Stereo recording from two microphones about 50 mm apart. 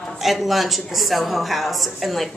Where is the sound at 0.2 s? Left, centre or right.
Centre.